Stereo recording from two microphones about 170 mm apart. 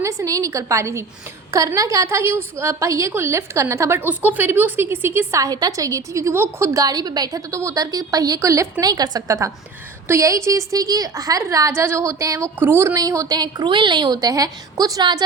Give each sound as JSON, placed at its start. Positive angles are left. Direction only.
{"t": 0.0, "sound": "a woman's voice", "side_deg": -20}